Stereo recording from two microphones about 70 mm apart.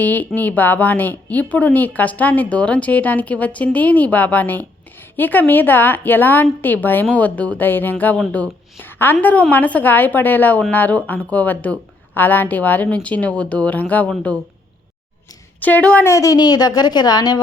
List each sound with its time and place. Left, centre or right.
0.0 s a woman's voice: left
15.6 s speech: left
16.0 s a woman's voice: left
16.4 s a woman's voice: left